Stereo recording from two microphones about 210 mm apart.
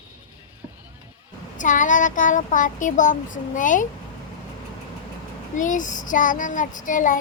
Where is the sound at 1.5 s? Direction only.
40° left (ahead or behind).